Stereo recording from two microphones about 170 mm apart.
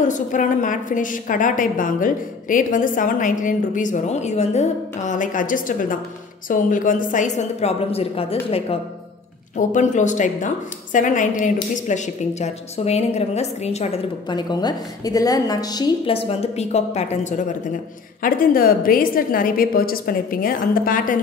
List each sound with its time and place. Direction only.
0.0 s a woman's voice: 50° left (ahead or behind)
9.6 s a woman's voice: 45° left (ahead or behind)
14.3 s a woman's voice: 25° left (ahead or behind); by 17.6 s 45° left (ahead or behind)
18.2 s a woman's voice: 55° left (ahead or behind)